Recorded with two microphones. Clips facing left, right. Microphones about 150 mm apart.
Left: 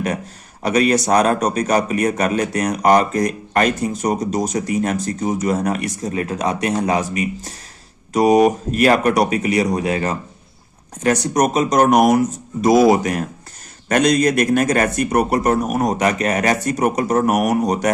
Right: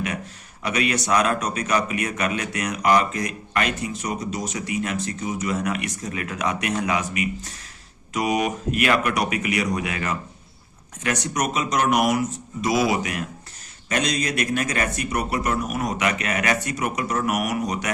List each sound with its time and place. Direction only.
0.6 s a man's voice: 40° left (ahead or behind)